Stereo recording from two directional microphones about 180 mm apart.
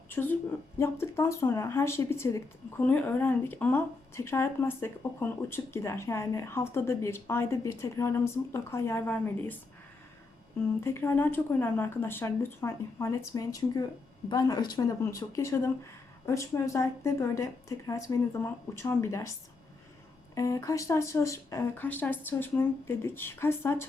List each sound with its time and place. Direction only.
0.1 s a woman's voice: 10° left (ahead or behind)
10.8 s speech: 15° left (ahead or behind)
20.3 s speech: 20° left (ahead or behind)